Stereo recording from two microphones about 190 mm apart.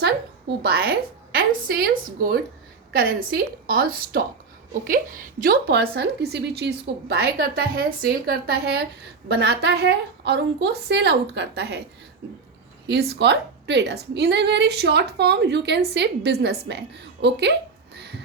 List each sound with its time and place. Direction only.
0.6 s a woman's voice: 55° right (ahead or behind)
2.9 s a woman's voice: 50° right (ahead or behind)
12.9 s a woman's voice: 60° right (ahead or behind)
17.9 s a sound: 65° right (ahead or behind)